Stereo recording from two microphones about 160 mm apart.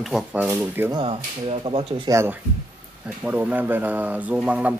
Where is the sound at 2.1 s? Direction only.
15° right (ahead or behind).